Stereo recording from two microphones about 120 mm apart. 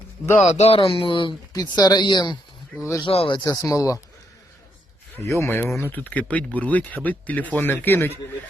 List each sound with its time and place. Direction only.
0.5 s speech: 60° left (ahead or behind); by 2.4 s 40° left (ahead or behind)
2.7 s speech: 20° left (ahead or behind)
3.0 s speech: 50° left (ahead or behind)
3.3 s speech: 30° left (ahead or behind)
5.4 s speech: 20° left (ahead or behind)